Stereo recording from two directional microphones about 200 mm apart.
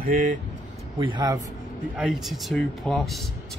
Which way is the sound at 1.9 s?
Centre (ahead or behind).